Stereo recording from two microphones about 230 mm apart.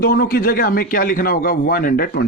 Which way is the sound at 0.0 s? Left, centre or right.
Left.